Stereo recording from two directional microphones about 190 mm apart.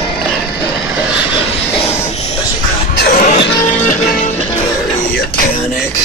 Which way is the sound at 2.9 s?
50° left (ahead or behind).